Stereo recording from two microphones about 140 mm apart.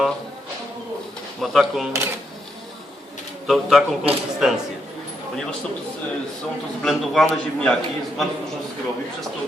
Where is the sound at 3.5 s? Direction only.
5° right (ahead or behind).